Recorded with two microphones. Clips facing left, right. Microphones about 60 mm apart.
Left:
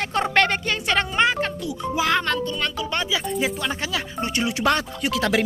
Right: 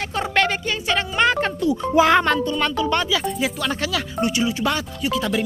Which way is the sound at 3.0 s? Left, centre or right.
Left.